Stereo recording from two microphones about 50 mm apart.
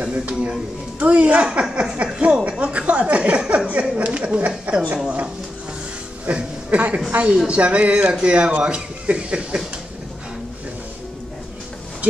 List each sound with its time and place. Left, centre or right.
0.0 s a man's voice: right
2.6 s a sound: right
3.8 s a man's voice: right
6.2 s music: right
7.4 s a man's voice: right
12.0 s a sound: right